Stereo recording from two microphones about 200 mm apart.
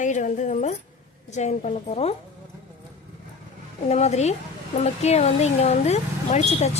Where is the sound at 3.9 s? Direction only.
35° left (ahead or behind).